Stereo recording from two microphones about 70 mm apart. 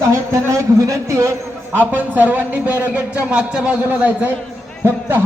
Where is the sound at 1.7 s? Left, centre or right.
Right.